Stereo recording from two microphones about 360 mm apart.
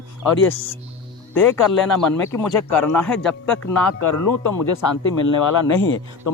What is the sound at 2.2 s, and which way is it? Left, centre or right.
Speech, centre.